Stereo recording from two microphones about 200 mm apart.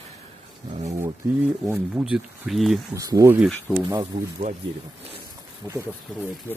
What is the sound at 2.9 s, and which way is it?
Speech, 15° right (ahead or behind).